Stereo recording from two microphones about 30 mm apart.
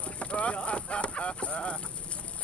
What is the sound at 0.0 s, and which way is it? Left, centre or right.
Clip-clop, left.